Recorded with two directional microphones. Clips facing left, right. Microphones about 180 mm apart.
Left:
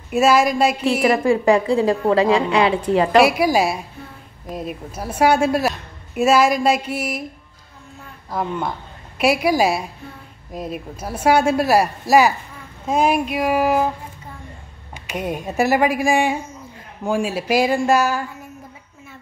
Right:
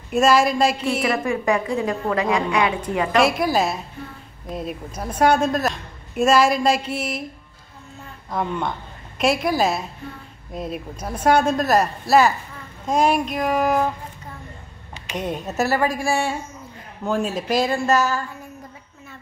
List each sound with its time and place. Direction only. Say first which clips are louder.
0.1 s speech: left 1 dB; 5° left (ahead or behind)
1.0 s a woman's voice: left 7 dB; 30° left (ahead or behind)
3.2 s a woman's voice: left 2 dB; 5° left (ahead or behind)
8.3 s a woman's voice: left 1 dB; 5° left (ahead or behind)
15.0 s a woman's voice: left 2 dB; 10° left (ahead or behind)